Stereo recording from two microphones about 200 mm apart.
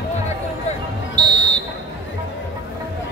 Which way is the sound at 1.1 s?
20° right (ahead or behind).